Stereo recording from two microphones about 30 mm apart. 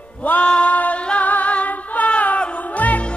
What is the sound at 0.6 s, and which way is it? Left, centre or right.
Music, left.